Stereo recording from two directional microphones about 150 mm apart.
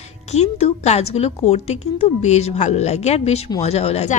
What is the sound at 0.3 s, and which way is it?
A woman's voice, 45° left (ahead or behind).